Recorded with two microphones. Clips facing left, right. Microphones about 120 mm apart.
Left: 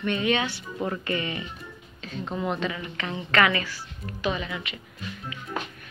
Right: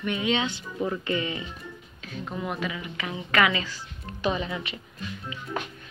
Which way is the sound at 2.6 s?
10° right (ahead or behind).